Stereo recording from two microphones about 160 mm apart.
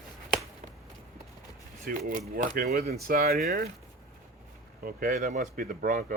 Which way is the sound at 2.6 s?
70° right (ahead or behind).